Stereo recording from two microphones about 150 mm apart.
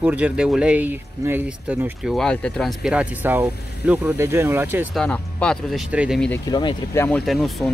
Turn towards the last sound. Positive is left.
turn(degrees=0)  # may be behind; listen again after turning